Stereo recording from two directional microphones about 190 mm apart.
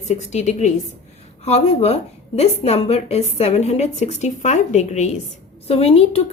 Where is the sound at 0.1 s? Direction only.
35° left (ahead or behind).